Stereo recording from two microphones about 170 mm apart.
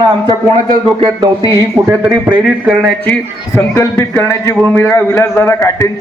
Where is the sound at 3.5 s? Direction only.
15° left (ahead or behind).